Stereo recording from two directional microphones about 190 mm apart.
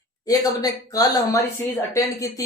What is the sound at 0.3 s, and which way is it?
Speech, 20° left (ahead or behind).